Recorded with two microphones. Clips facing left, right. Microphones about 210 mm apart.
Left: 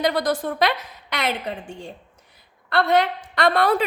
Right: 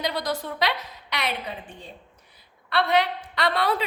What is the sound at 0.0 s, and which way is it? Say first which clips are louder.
A woman's voice: left 6 dB; 50° left (ahead or behind).